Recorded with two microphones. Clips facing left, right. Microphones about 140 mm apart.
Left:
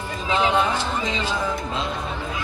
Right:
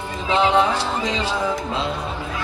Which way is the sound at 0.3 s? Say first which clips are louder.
Right 3 dB; 30° right (ahead or behind).